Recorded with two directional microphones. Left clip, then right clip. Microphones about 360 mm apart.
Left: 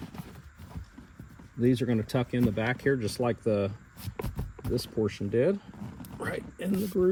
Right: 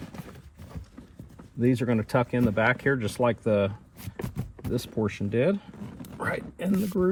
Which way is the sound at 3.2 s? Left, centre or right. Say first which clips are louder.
Right 4 dB; right.